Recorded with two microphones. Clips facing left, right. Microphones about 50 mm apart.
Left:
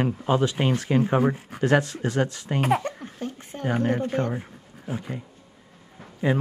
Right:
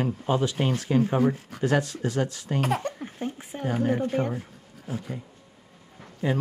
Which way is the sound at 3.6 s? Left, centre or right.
Left.